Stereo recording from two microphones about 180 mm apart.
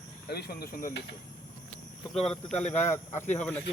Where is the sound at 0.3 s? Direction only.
60° left (ahead or behind).